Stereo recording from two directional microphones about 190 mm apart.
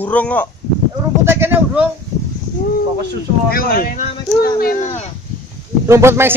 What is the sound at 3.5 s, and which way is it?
Speech, 50° left (ahead or behind).